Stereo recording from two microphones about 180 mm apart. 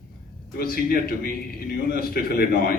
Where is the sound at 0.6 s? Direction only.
55° left (ahead or behind).